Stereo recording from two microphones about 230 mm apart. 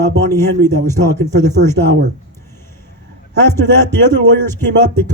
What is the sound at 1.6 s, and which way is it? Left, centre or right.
Speech, right.